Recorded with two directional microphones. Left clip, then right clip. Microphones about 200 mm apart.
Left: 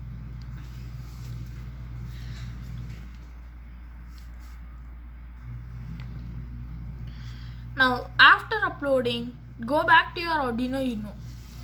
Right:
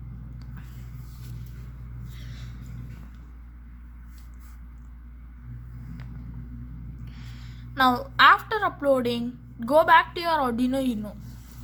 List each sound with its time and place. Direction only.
7.1 s a woman's voice: 60° right (ahead or behind)